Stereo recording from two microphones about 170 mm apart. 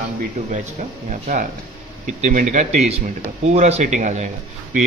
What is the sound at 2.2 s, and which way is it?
A man's voice, 45° right (ahead or behind).